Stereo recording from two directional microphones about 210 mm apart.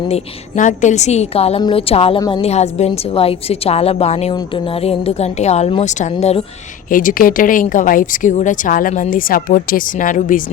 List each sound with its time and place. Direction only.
0.1 s a woman's voice: 35° left (ahead or behind)
6.9 s a woman's voice: 40° left (ahead or behind)